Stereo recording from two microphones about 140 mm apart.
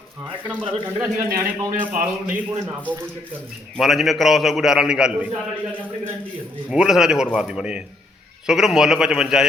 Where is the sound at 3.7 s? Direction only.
Centre (ahead or behind).